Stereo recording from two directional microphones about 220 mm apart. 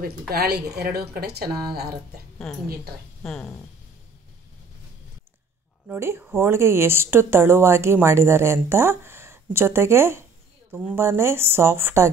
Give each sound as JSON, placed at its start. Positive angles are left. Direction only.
{"t": 0.3, "sound": "speech", "side_deg": -45}
{"t": 3.2, "sound": "speech", "side_deg": 5}
{"t": 5.9, "sound": "speech", "side_deg": -10}